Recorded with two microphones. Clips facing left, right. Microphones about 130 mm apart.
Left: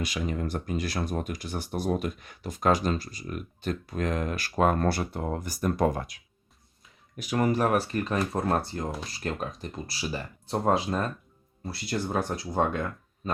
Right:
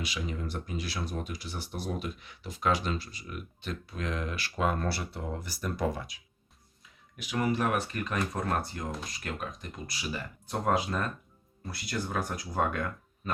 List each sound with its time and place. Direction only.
0.0 s speech: 50° left (ahead or behind)
7.2 s speech: 45° left (ahead or behind); by 13.3 s 25° left (ahead or behind)